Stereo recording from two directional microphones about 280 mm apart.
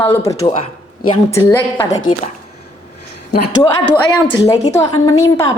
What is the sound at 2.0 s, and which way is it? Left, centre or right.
Speech, left.